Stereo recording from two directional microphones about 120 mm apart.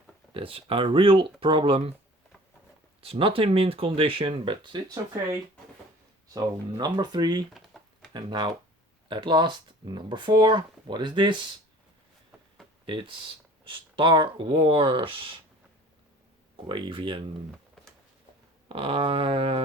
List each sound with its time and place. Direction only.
0.3 s speech: 50° right (ahead or behind)
3.0 s speech: 50° right (ahead or behind)
6.2 s speech: 35° right (ahead or behind)
7.7 s a sound: centre (ahead or behind)
8.1 s speech: 35° right (ahead or behind)
12.8 s speech: 45° right (ahead or behind)
16.6 s speech: 40° right (ahead or behind)
18.7 s speech: 50° right (ahead or behind)